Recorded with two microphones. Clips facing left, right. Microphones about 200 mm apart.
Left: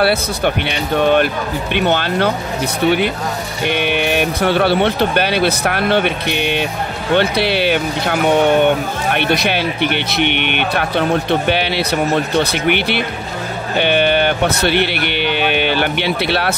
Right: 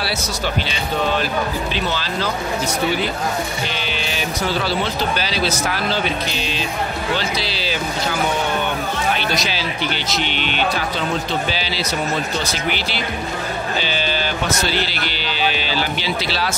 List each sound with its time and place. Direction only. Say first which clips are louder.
0.0 s speech: left 9 dB; 60° left (ahead or behind)
3.6 s speech: left 9 dB; 60° left (ahead or behind)